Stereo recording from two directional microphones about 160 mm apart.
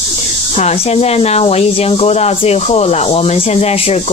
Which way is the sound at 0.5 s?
40° left (ahead or behind).